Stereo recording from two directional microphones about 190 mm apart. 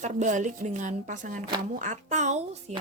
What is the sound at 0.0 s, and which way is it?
Speech, 40° right (ahead or behind).